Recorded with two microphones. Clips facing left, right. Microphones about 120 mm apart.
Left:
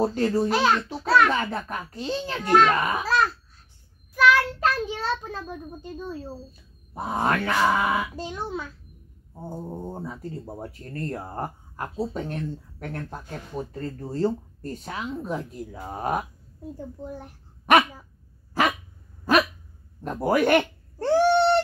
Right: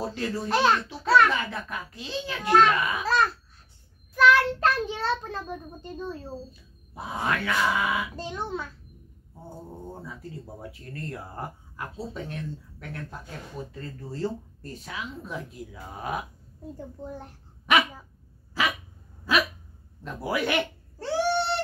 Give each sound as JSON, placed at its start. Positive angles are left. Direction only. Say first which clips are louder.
{"t": 0.0, "sound": "speech", "louder": "left 8 dB", "side_deg": 45}
{"t": 0.5, "sound": "a child's voice", "louder": "left 1 dB", "side_deg": 5}
{"t": 1.3, "sound": "speech", "louder": "left 4 dB", "side_deg": 45}
{"t": 4.1, "sound": "a child's voice", "louder": "even", "side_deg": 5}
{"t": 6.9, "sound": "speech", "louder": "left 4 dB", "side_deg": 45}
{"t": 8.2, "sound": "a child's voice", "louder": "left 1 dB", "side_deg": 10}
{"t": 9.5, "sound": "speech", "louder": "left 6 dB", "side_deg": 30}
{"t": 10.0, "sound": "speech", "louder": "left 5 dB", "side_deg": 45}
{"t": 16.7, "sound": "a child's voice", "louder": "left 2 dB", "side_deg": 5}
{"t": 18.6, "sound": "speech", "louder": "left 5 dB", "side_deg": 50}
{"t": 19.3, "sound": "hiccup", "louder": "left 5 dB", "side_deg": 50}
{"t": 20.0, "sound": "cat", "louder": "left 7 dB", "side_deg": 45}